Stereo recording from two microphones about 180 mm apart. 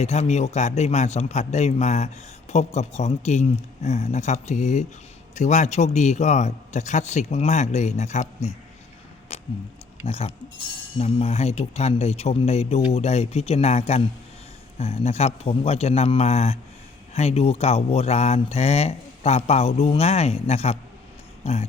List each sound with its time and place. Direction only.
0.0 s speech: 40° left (ahead or behind)
9.3 s tick-tock: 35° left (ahead or behind)
10.1 s speech: 35° left (ahead or behind)